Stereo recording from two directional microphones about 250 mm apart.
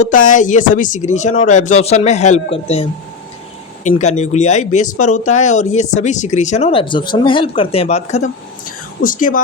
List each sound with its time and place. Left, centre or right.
0.0 s speech: left
3.8 s speech: left